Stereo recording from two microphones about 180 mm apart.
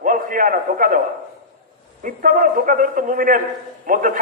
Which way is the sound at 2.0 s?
50° right (ahead or behind).